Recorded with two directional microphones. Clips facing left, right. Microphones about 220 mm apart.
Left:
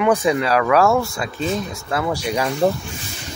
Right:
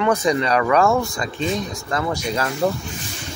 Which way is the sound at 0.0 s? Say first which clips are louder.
Left 1 dB; 10° left (ahead or behind).